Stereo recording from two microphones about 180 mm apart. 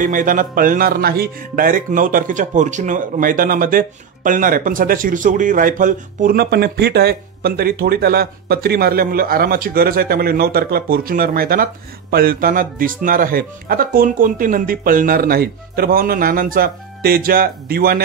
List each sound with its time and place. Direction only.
0.0 s speech: 50° right (ahead or behind)